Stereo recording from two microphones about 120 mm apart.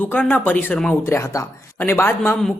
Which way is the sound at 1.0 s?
25° left (ahead or behind).